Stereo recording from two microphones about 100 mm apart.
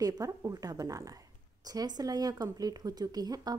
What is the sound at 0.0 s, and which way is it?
A woman's voice, 35° right (ahead or behind).